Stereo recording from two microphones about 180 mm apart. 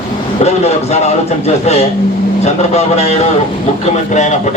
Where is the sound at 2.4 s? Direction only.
35° left (ahead or behind).